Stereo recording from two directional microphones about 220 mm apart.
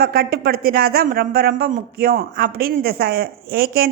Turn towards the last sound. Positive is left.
turn(degrees=-45)  # may be behind; listen again after turning